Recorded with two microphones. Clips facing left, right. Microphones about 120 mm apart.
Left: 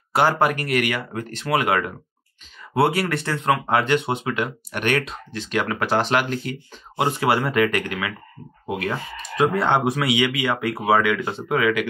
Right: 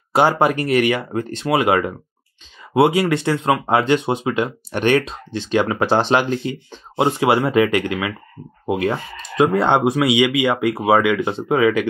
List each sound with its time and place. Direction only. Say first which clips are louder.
0.1 s speech: right 3 dB; 20° right (ahead or behind)